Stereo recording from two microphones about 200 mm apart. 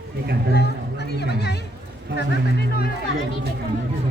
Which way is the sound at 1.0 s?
55° left (ahead or behind).